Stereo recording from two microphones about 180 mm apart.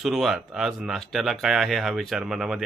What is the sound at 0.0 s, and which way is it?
Speech, centre (ahead or behind).